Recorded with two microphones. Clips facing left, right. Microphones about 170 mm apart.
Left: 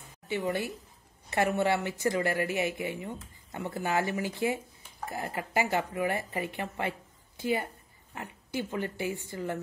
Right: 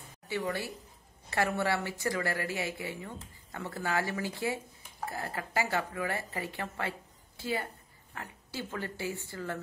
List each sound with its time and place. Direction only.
0.3 s a woman's voice: 20° left (ahead or behind)